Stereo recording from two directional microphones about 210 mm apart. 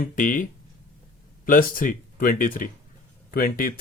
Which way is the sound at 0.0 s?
40° left (ahead or behind).